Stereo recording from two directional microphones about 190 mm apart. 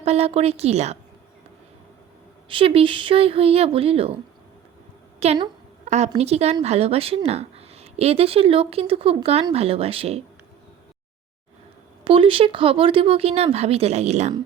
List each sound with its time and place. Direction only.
0.0 s speech: 35° right (ahead or behind)
2.5 s speech: 30° right (ahead or behind)
5.2 s speech: 35° right (ahead or behind)
5.8 s a sound: 35° right (ahead or behind)
6.1 s speech: 35° right (ahead or behind)
12.0 s speech: 30° right (ahead or behind)